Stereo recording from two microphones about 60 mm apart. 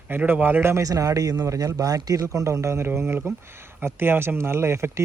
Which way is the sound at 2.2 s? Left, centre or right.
Right.